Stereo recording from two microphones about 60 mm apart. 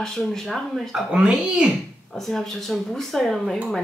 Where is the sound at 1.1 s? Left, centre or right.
Centre.